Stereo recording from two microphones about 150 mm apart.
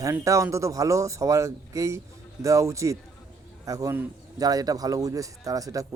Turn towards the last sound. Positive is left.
turn(degrees=-25)  # may be behind; listen again after turning